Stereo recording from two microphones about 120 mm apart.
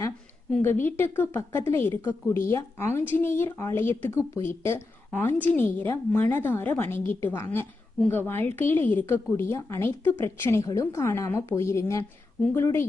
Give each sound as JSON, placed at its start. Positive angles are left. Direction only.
{"t": 0.6, "sound": "a woman's voice", "side_deg": 20}